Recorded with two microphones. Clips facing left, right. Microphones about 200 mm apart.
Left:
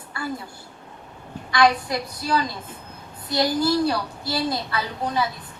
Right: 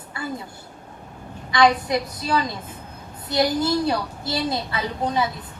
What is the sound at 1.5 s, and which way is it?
A woman's voice, 20° right (ahead or behind).